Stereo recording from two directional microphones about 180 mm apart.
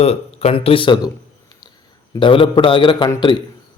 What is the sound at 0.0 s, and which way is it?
Speech, 35° left (ahead or behind).